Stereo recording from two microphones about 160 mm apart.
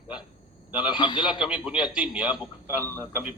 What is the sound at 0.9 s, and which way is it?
Speech, 30° left (ahead or behind).